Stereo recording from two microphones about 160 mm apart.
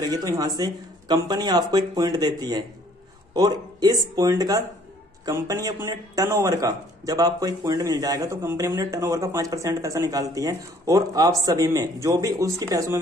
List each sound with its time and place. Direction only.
0.0 s a man's voice: 20° right (ahead or behind)